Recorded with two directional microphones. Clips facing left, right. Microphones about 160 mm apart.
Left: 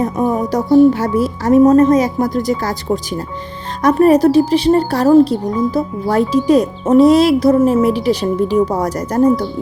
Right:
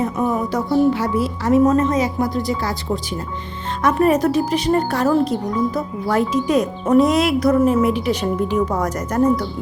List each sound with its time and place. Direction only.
0.0 s speech: 40° left (ahead or behind)